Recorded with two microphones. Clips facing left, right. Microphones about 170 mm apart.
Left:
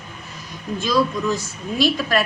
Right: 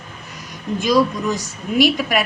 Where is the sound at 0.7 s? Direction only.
15° right (ahead or behind).